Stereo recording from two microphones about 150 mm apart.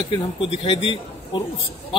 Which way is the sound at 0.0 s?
35° left (ahead or behind).